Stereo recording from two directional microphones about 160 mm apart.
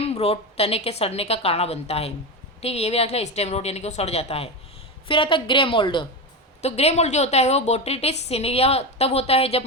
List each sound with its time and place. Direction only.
0.0 s a woman's voice: 40° left (ahead or behind)
6.6 s a woman's voice: 40° left (ahead or behind)